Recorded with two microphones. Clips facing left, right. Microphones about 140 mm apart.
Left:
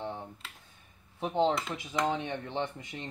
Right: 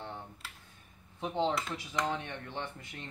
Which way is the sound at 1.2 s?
20° left (ahead or behind).